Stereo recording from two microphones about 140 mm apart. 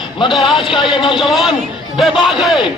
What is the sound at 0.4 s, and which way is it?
Speech, 35° left (ahead or behind).